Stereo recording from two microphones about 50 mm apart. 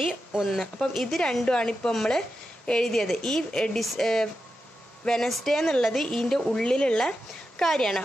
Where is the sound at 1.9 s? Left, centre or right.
Centre.